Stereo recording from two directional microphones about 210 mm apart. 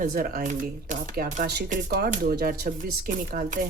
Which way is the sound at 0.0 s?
45° right (ahead or behind).